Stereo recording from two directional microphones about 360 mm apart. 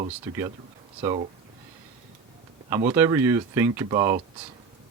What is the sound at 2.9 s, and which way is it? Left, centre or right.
Speech, centre.